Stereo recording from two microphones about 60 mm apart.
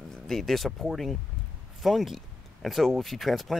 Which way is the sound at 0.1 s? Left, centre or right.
Centre.